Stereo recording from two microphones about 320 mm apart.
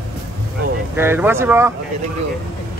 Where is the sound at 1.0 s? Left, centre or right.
Centre.